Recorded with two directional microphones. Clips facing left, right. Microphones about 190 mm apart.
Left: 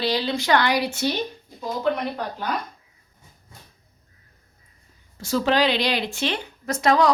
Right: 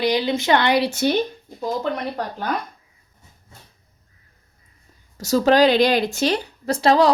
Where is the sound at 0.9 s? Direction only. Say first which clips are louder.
Right 4 dB; 45° right (ahead or behind).